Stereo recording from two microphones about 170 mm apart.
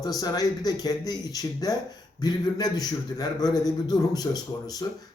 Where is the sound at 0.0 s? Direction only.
20° left (ahead or behind).